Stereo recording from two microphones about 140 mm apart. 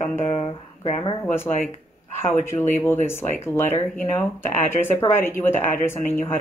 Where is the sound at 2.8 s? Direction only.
15° left (ahead or behind).